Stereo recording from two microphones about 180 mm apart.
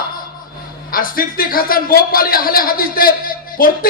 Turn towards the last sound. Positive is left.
turn(degrees=50)  # may be behind; listen again after turning